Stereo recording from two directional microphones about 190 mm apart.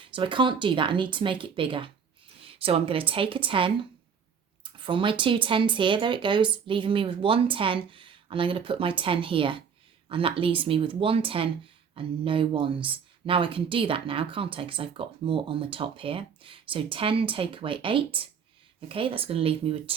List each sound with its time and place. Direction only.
0.0 s speech: 25° right (ahead or behind)